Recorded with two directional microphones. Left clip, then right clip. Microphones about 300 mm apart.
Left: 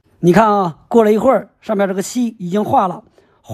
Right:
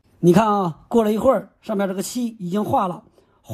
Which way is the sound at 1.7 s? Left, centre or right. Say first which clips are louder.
Left 7 dB; right.